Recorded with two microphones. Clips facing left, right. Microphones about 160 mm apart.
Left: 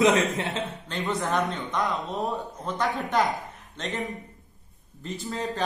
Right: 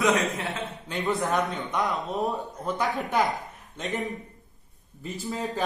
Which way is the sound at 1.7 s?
15° right (ahead or behind).